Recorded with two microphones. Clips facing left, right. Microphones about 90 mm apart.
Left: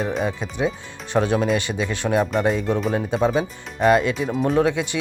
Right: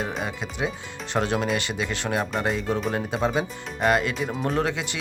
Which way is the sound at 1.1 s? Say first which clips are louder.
Left 5 dB; centre (ahead or behind).